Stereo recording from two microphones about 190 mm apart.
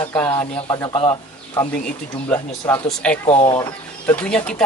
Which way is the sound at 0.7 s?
20° left (ahead or behind).